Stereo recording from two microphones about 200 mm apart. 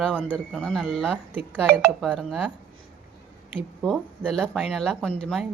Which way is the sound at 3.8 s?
5° left (ahead or behind).